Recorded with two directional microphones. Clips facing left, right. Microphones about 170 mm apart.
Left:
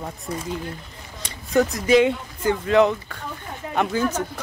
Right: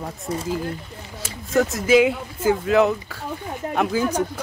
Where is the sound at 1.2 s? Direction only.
Centre (ahead or behind).